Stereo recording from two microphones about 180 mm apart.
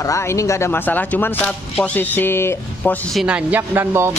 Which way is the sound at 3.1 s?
5° right (ahead or behind).